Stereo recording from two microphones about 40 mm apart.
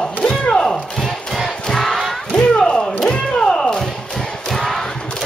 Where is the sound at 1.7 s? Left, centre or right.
Centre.